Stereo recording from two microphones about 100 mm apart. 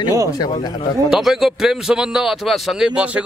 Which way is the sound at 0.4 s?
50° left (ahead or behind).